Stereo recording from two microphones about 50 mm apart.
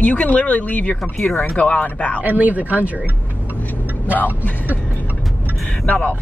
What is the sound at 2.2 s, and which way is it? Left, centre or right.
Speech, right.